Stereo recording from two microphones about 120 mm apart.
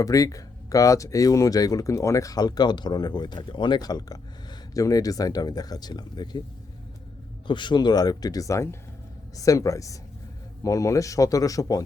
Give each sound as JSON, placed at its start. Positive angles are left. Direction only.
{"t": 0.0, "sound": "speech", "side_deg": 30}
{"t": 7.4, "sound": "speech", "side_deg": 40}